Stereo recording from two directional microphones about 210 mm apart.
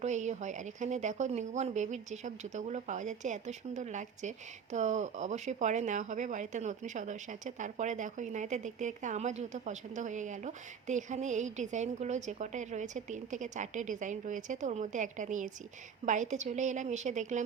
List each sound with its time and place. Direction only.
0.0 s speech: 35° right (ahead or behind)